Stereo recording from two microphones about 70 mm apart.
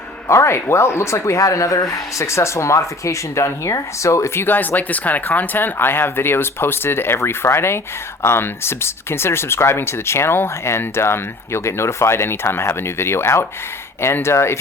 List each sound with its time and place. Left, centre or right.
0.3 s speech: left
4.4 s speech: left